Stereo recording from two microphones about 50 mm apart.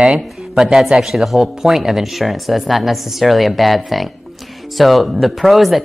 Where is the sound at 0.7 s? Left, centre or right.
Centre.